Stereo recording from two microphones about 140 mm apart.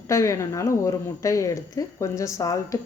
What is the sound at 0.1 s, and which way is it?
Speech, 20° left (ahead or behind).